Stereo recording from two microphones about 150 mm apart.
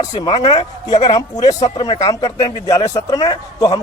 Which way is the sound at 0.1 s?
35° left (ahead or behind).